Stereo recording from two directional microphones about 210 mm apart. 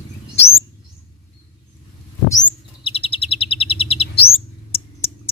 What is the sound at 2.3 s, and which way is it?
Chirp, 20° left (ahead or behind).